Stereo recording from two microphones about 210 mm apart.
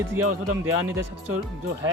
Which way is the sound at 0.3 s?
90° right.